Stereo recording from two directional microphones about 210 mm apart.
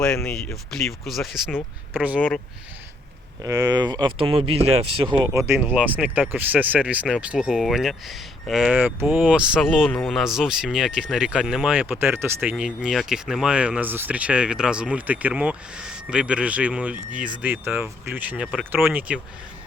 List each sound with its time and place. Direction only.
0.0 s speech: 5° left (ahead or behind)
3.4 s speech: 15° right (ahead or behind)
5.2 s speech: 15° right (ahead or behind)